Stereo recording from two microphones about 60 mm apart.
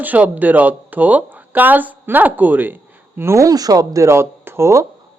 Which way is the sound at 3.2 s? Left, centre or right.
Right.